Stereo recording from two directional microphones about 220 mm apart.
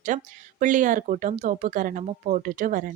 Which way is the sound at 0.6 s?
35° right (ahead or behind).